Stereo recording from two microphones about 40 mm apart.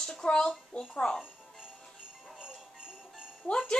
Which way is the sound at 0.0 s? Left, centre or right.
Centre.